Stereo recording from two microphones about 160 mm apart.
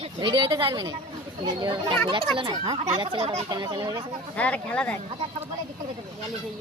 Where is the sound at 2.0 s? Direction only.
35° right (ahead or behind).